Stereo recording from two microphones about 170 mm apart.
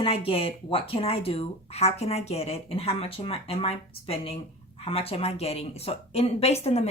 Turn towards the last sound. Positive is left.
turn(degrees=40)  # may be behind; listen again after turning